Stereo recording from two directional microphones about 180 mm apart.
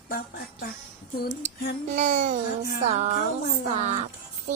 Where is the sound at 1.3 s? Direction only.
40° right (ahead or behind).